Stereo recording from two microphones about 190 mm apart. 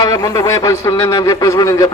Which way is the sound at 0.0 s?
20° left (ahead or behind).